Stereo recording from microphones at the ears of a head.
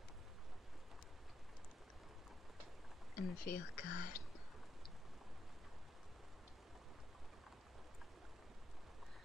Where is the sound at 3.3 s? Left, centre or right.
Left.